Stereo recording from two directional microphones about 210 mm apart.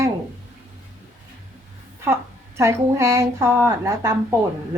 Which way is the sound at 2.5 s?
15° right (ahead or behind).